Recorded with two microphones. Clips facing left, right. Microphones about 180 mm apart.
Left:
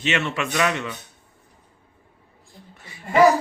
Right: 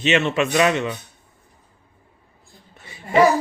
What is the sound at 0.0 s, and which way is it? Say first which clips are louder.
Speech: right 6 dB; 20° right (ahead or behind).